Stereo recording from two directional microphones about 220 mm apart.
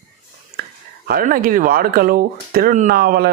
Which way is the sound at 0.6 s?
45° right (ahead or behind).